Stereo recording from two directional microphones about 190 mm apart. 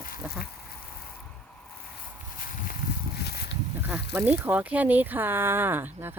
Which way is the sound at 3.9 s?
5° right (ahead or behind).